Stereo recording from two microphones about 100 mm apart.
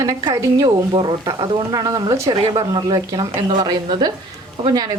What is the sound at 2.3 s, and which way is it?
A woman's voice, 50° right (ahead or behind).